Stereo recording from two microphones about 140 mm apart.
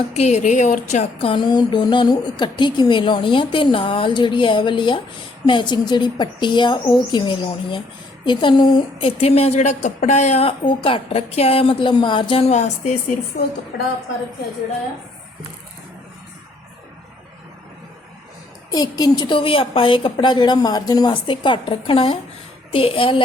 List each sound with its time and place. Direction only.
0.1 s a woman's voice: 50° left (ahead or behind)
1.2 s a woman's voice: 35° left (ahead or behind); by 10.5 s 50° left (ahead or behind)
10.7 s a woman's voice: 40° left (ahead or behind)
12.5 s a woman's voice: 55° left (ahead or behind)
18.7 s a woman's voice: 30° left (ahead or behind)